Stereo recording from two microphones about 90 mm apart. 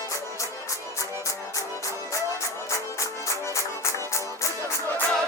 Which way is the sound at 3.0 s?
35° left (ahead or behind).